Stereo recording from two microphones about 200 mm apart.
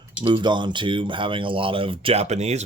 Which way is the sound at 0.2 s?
25° right (ahead or behind).